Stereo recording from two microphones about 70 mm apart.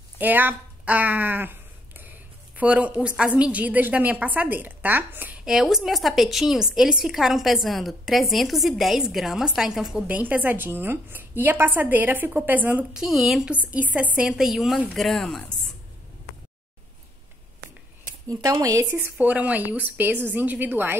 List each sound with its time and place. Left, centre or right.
0.2 s a sound: right
3.3 s a woman's voice: centre
5.4 s a woman's voice: centre
10.0 s a woman's voice: right
12.9 s a woman's voice: centre
13.9 s a woman's voice: centre
14.3 s a woman's voice: centre
18.3 s speech: right
19.1 s a woman's voice: right